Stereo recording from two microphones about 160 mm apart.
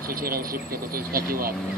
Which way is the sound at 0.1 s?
65° right (ahead or behind).